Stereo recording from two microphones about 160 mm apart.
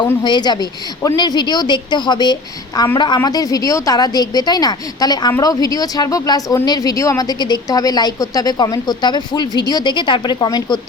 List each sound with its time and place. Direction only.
0.2 s speech: 30° left (ahead or behind)